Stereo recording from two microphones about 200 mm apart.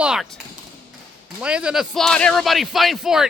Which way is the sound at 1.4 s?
5° right (ahead or behind).